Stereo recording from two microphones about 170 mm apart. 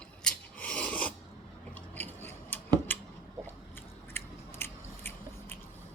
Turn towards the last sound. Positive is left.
turn(degrees=15)  # may be behind; listen again after turning